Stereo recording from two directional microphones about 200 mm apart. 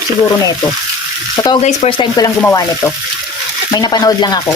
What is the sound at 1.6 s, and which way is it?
Speech, 30° left (ahead or behind).